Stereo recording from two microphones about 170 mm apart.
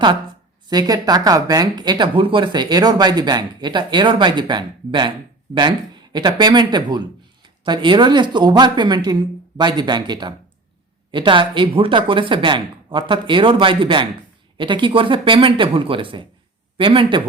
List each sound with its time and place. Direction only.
0.7 s speech: 25° right (ahead or behind)